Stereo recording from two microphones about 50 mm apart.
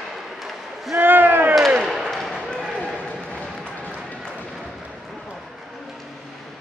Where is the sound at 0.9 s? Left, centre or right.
Right.